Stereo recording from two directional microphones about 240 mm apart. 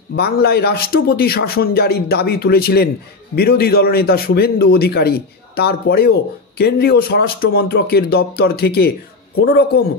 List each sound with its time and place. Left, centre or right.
0.1 s a man's voice: left